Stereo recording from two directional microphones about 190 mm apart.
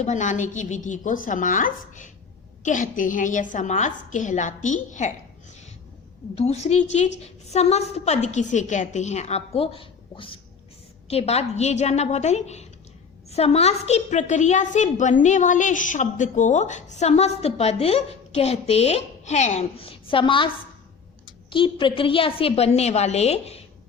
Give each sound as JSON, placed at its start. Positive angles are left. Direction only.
{"t": 0.0, "sound": "a woman's voice", "side_deg": 40}
{"t": 6.3, "sound": "a woman's voice", "side_deg": 35}
{"t": 21.5, "sound": "a woman's voice", "side_deg": 25}